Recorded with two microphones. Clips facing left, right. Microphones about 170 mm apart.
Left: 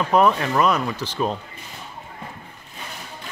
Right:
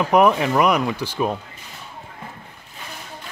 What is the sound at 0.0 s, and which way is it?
Speech, 15° right (ahead or behind).